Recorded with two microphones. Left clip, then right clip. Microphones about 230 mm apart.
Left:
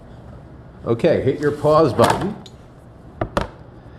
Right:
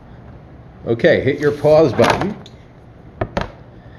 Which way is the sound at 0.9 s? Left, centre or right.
Centre.